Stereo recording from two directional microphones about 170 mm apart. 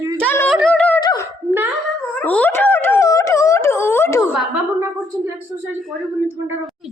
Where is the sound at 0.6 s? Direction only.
5° left (ahead or behind).